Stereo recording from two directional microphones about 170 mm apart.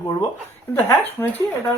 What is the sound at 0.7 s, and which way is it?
Speech, 10° left (ahead or behind).